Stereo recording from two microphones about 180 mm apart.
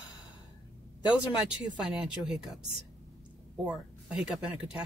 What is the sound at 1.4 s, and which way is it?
Speech, 5° right (ahead or behind).